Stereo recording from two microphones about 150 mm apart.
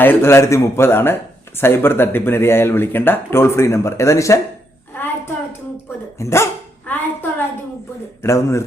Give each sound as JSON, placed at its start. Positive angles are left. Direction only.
{"t": 0.0, "sound": "speech", "side_deg": 15}
{"t": 4.9, "sound": "hands", "side_deg": 15}
{"t": 6.1, "sound": "dog", "side_deg": 20}
{"t": 8.2, "sound": "a man's voice", "side_deg": 20}